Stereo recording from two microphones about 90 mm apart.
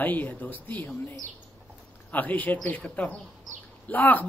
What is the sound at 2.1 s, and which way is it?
Speech, 20° left (ahead or behind).